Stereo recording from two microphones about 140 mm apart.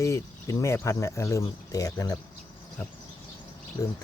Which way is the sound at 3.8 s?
20° left (ahead or behind).